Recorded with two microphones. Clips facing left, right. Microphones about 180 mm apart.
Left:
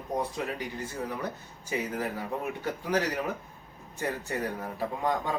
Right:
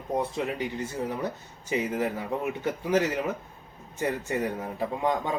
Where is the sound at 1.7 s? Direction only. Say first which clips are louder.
Right 4 dB; 20° right (ahead or behind).